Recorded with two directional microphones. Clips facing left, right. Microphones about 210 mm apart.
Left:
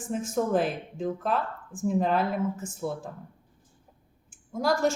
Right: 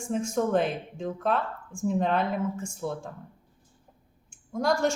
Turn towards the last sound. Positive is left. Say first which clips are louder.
# even
turn(degrees=0)  # may be behind; listen again after turning